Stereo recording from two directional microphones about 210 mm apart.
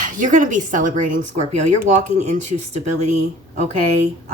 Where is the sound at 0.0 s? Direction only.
35° right (ahead or behind).